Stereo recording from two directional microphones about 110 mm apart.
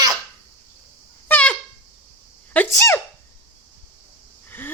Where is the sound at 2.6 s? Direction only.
25° left (ahead or behind).